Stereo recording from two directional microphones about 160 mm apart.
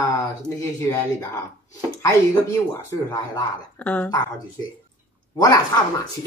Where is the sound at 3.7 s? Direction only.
10° left (ahead or behind).